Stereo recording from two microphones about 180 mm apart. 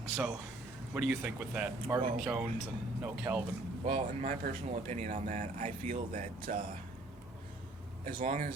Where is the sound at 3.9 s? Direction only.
30° right (ahead or behind); by 6.8 s 50° right (ahead or behind).